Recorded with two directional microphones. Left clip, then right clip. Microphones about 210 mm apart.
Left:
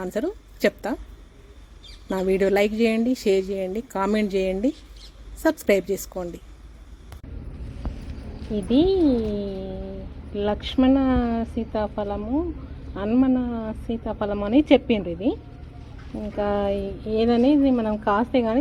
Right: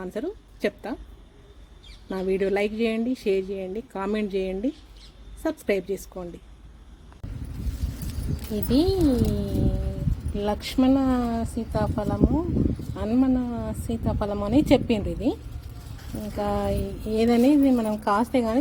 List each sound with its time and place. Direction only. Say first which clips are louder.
0.0 s a woman's voice: left 4 dB; 15° left (ahead or behind)
2.0 s a woman's voice: left 4 dB; 10° left (ahead or behind)
8.3 s a woman's voice: left 2 dB; centre (ahead or behind)
15.8 s clip-clop: left 2 dB; centre (ahead or behind)
16.3 s a woman's voice: left 3 dB; centre (ahead or behind)
17.2 s a woman's voice: left 1 dB; 15° right (ahead or behind)